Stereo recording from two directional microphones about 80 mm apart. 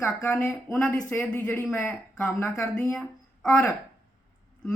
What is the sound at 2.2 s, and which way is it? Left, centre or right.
Speech, left.